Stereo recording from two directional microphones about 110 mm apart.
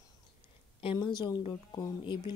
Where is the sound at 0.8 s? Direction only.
55° left (ahead or behind).